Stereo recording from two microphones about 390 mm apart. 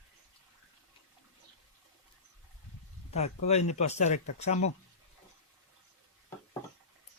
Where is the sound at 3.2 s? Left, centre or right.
Centre.